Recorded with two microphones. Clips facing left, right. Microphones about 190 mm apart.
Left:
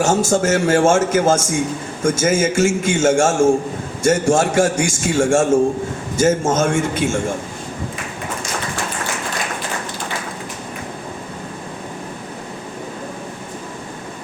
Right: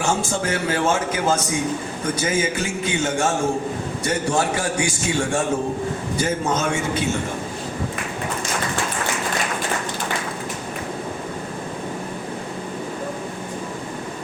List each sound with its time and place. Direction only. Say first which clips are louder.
0.0 s a man's voice: left 7 dB; 40° left (ahead or behind)